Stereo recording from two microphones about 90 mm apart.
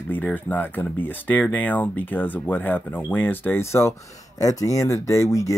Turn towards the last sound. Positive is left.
turn(degrees=35)  # may be behind; listen again after turning